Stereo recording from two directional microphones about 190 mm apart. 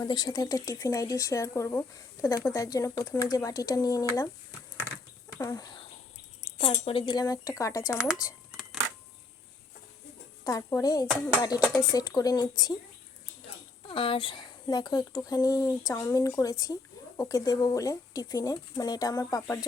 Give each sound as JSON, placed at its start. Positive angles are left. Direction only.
{"t": 0.1, "sound": "speech", "side_deg": 20}
{"t": 5.4, "sound": "speech", "side_deg": 20}
{"t": 7.9, "sound": "speech", "side_deg": -5}
{"t": 10.4, "sound": "speech", "side_deg": 20}
{"t": 13.8, "sound": "speech", "side_deg": 30}